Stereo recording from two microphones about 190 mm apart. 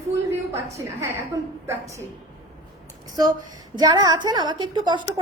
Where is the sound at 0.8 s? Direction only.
15° right (ahead or behind).